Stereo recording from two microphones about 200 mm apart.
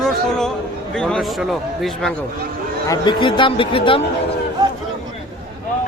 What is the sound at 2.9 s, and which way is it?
A man's voice, 25° left (ahead or behind).